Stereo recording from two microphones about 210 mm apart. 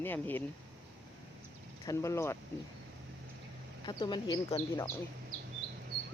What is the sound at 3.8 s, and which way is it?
Speech, 20° left (ahead or behind).